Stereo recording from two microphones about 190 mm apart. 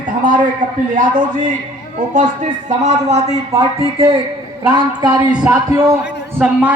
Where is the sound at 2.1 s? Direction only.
40° right (ahead or behind).